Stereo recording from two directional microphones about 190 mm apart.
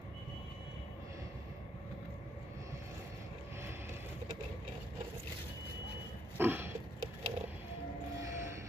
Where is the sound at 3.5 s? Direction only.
10° right (ahead or behind).